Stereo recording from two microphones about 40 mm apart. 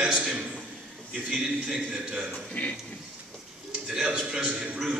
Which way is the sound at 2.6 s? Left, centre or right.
Left.